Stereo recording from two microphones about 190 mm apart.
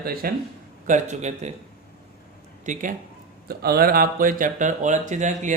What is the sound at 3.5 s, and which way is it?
Speech, 55° right (ahead or behind).